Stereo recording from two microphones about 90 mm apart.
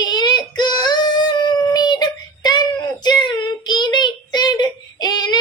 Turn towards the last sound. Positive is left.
turn(degrees=50)  # may be behind; listen again after turning